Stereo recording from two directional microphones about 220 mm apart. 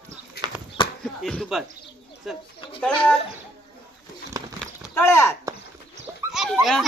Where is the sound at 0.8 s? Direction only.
25° left (ahead or behind).